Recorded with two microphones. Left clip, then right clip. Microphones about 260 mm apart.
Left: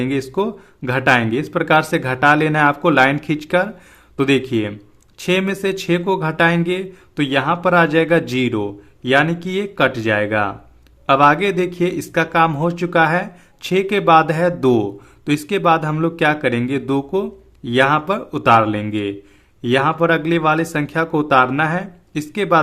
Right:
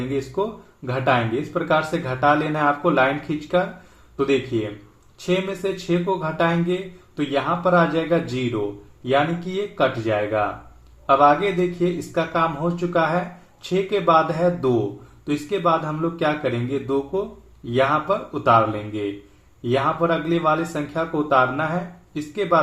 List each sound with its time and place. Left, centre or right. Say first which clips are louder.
0.1 s speech: left 4 dB; left